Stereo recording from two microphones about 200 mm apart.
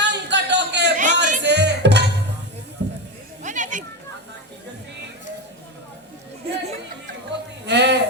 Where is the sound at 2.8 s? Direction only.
60° right (ahead or behind).